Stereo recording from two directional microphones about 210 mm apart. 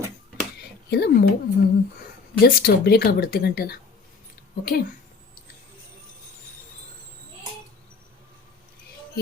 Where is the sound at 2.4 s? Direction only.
45° left (ahead or behind).